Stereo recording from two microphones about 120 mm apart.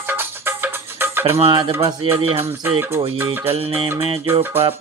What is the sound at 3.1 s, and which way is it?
Speech, 20° right (ahead or behind).